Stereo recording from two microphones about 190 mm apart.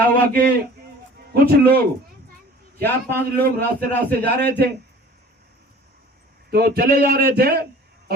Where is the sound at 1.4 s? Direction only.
55° right (ahead or behind).